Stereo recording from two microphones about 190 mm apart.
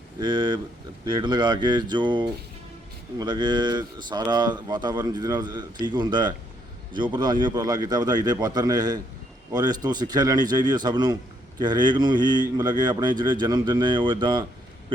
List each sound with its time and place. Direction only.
0.2 s speech: 25° right (ahead or behind)